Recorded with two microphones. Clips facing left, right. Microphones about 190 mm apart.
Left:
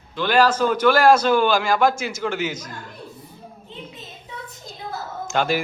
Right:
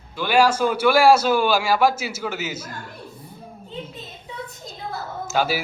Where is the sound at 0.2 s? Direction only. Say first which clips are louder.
Even; 10° right (ahead or behind).